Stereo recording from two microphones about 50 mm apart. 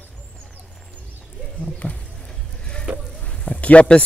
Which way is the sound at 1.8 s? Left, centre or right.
Left.